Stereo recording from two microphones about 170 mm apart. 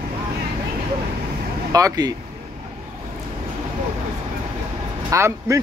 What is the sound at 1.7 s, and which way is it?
Speech, 20° right (ahead or behind).